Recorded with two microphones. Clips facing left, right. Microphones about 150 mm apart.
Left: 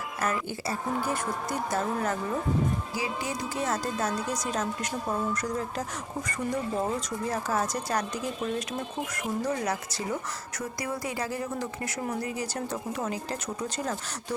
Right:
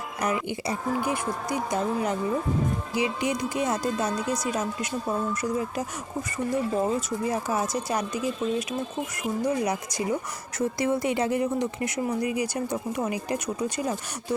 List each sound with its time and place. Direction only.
0.2 s speech: 15° right (ahead or behind)
10.6 s speech: 25° right (ahead or behind)